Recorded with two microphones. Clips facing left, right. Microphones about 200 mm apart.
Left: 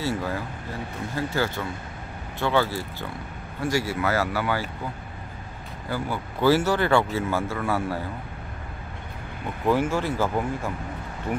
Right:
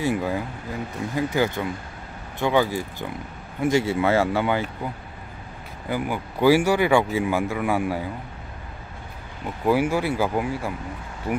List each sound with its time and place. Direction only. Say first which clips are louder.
0.0 s speech: right 4 dB; 15° right (ahead or behind)
5.9 s speech: right 3 dB; 15° right (ahead or behind)
9.7 s speech: right 2 dB; 10° right (ahead or behind)